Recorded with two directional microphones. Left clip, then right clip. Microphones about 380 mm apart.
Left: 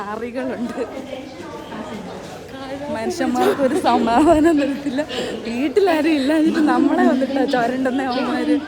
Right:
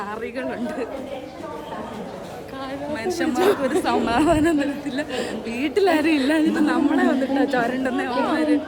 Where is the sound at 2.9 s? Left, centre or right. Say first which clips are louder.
Left 3 dB; centre.